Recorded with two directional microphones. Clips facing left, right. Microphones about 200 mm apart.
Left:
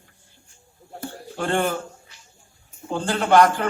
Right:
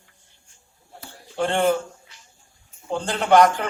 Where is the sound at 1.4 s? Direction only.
20° right (ahead or behind).